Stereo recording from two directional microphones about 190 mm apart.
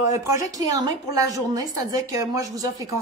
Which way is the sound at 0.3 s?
20° right (ahead or behind).